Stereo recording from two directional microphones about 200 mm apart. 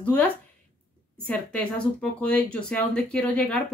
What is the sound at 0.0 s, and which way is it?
A woman's voice, 10° left (ahead or behind).